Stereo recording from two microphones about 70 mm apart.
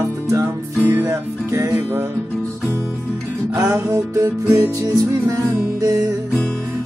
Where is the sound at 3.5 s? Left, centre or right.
Right.